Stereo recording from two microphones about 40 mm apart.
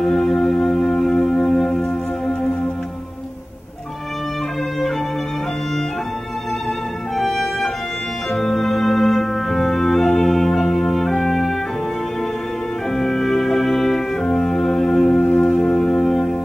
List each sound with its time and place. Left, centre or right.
0.0 s music: centre
7.2 s music: centre
12.9 s music: centre